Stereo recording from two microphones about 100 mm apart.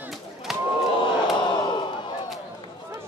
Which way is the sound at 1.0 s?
50° left (ahead or behind).